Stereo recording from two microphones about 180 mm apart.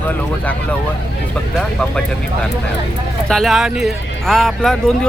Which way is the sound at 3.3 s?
Centre (ahead or behind).